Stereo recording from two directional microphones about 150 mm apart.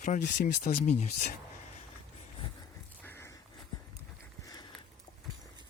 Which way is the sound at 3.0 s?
15° left (ahead or behind).